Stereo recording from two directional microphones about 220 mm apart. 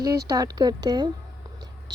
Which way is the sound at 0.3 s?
15° right (ahead or behind).